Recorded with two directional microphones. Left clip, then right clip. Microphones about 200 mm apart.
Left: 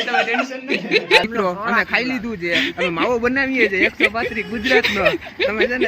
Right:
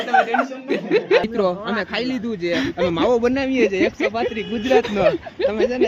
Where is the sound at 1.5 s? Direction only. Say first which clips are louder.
Left 3 dB; centre (ahead or behind).